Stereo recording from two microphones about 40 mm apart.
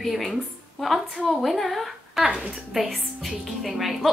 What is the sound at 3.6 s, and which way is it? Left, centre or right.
Speech, centre.